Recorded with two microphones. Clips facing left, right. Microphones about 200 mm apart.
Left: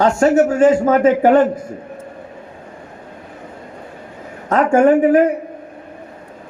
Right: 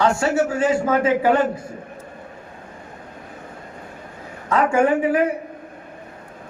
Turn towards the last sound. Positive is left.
turn(degrees=45)  # may be behind; listen again after turning